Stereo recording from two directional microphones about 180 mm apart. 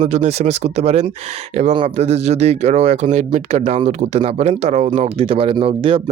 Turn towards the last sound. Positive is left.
turn(degrees=-30)  # may be behind; listen again after turning